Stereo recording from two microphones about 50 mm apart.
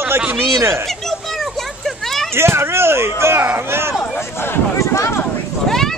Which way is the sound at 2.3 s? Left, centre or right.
Right.